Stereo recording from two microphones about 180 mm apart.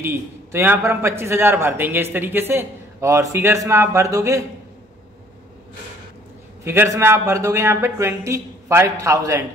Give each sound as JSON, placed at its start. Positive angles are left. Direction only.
{"t": 0.0, "sound": "a man's voice", "side_deg": -15}
{"t": 6.6, "sound": "a man's voice", "side_deg": -15}